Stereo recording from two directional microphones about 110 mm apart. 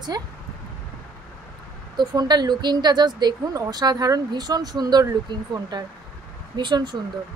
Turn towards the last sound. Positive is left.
turn(degrees=-45)  # may be behind; listen again after turning